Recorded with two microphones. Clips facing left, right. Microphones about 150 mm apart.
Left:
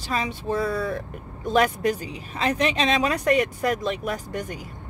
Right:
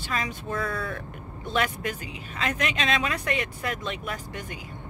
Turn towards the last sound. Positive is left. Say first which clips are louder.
# left 6 dB
turn(degrees=45)  # may be behind; listen again after turning